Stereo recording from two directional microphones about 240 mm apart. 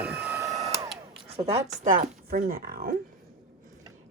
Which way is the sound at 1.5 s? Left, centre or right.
Right.